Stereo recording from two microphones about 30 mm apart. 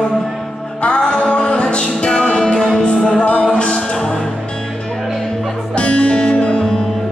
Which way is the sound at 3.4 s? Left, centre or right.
Left.